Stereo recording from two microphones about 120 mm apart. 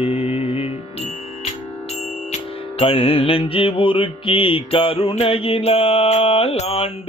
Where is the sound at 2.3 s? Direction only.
50° left (ahead or behind).